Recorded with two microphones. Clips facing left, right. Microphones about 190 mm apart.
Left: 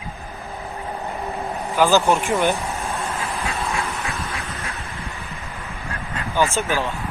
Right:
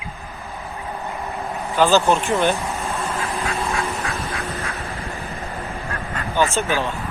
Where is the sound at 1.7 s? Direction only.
15° left (ahead or behind).